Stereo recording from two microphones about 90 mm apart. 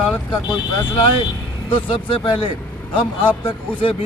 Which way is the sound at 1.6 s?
75° left (ahead or behind).